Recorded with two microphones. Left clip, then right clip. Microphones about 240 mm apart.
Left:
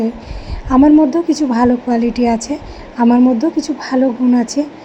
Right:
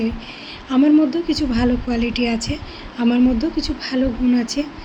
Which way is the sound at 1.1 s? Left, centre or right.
Left.